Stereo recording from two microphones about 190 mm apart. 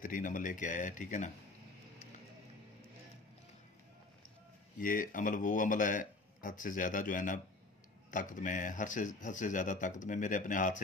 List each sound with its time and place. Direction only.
0.0 s speech: 45° left (ahead or behind)
4.7 s speech: 45° left (ahead or behind)